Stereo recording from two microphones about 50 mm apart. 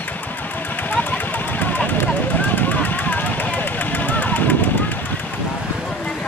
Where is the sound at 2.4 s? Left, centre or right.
Left.